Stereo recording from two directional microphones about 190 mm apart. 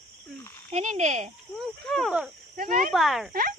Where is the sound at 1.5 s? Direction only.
Centre (ahead or behind).